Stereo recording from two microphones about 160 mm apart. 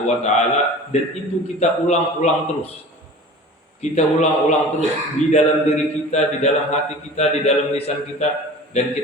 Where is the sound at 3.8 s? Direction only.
45° left (ahead or behind).